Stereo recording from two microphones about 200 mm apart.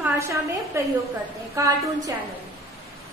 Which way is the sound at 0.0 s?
15° right (ahead or behind).